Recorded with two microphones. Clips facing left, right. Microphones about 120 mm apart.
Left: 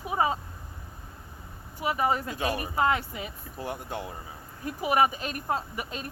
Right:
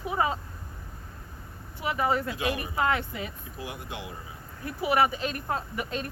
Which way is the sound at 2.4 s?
35° left (ahead or behind).